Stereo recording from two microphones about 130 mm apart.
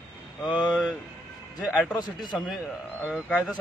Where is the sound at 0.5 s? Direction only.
35° left (ahead or behind).